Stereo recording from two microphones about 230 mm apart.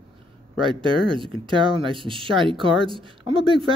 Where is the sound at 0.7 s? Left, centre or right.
Right.